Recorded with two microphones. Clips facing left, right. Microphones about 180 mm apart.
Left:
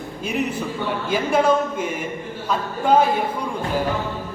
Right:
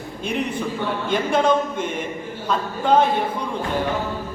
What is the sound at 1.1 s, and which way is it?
A man's voice, 10° left (ahead or behind).